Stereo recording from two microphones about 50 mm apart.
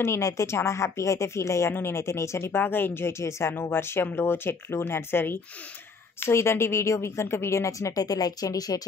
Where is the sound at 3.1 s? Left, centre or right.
Left.